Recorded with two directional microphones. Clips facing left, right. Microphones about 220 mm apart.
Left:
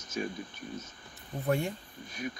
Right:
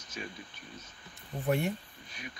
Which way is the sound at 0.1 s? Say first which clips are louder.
Left 8 dB; 45° left (ahead or behind).